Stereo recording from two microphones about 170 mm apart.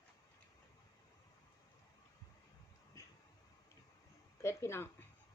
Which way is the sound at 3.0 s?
20° left (ahead or behind).